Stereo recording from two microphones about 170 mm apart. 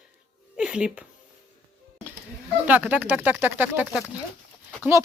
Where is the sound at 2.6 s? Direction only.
10° right (ahead or behind).